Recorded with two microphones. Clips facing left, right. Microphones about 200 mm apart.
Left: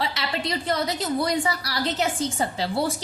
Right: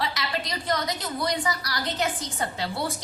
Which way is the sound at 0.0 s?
25° left (ahead or behind).